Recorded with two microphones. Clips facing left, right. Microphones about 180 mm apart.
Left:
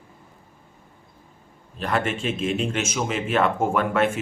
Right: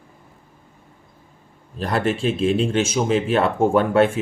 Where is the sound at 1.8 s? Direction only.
35° right (ahead or behind).